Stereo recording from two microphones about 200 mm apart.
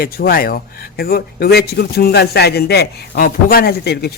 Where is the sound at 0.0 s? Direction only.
45° left (ahead or behind).